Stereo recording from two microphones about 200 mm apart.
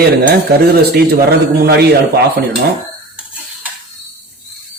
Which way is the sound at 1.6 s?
55° right (ahead or behind).